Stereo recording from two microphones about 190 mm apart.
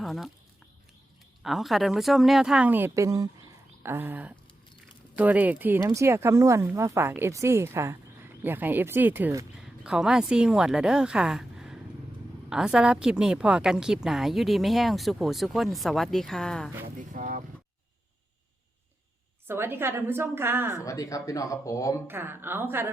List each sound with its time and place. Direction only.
0.0 s speech: centre (ahead or behind)
1.4 s a woman's voice: centre (ahead or behind)
9.6 s a woman's voice: 5° right (ahead or behind)
16.8 s a sound: 45° right (ahead or behind)
19.5 s speech: 10° right (ahead or behind)
20.7 s speech: 15° left (ahead or behind)
22.0 s speech: 10° right (ahead or behind)